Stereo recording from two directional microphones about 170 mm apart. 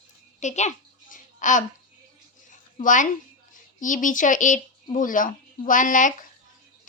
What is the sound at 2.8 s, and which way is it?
A woman's voice, 50° left (ahead or behind).